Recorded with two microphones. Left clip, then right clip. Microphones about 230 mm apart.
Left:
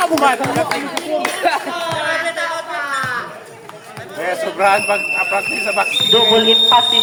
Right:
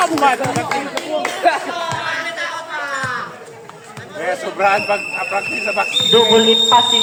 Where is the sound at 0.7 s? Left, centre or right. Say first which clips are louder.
Even; left.